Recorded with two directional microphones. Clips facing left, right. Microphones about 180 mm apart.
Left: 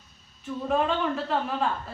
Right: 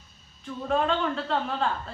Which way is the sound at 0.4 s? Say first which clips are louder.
Even; 5° left (ahead or behind).